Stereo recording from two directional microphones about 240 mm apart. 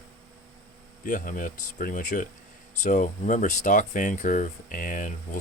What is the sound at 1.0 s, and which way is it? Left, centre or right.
Speech, left.